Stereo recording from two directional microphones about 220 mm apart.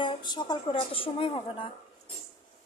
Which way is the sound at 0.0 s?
20° left (ahead or behind).